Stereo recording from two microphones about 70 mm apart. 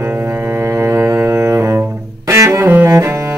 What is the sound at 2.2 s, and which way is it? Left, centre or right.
Music, right.